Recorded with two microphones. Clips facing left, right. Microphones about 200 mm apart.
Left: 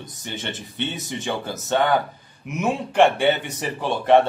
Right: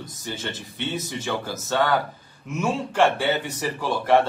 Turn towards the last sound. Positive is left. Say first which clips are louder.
# left 3 dB
turn(degrees=20)  # may be behind; listen again after turning